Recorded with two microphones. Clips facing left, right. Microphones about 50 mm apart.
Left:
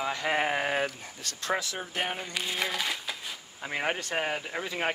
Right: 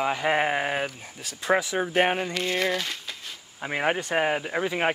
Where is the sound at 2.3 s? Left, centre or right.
Centre.